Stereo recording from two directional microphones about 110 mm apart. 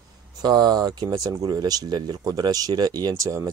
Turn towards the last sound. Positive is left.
turn(degrees=-30)  # may be behind; listen again after turning